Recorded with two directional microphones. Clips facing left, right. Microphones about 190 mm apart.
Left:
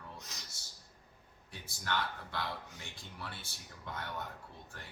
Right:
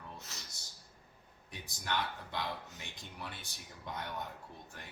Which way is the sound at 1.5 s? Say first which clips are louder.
Even; 20° right (ahead or behind).